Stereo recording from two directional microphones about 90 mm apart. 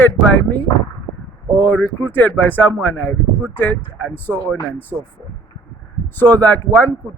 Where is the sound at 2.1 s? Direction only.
20° left (ahead or behind).